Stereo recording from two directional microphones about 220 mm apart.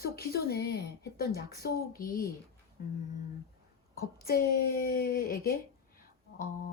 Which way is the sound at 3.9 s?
45° left (ahead or behind).